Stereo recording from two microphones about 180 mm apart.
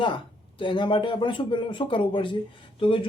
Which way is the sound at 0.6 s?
25° left (ahead or behind).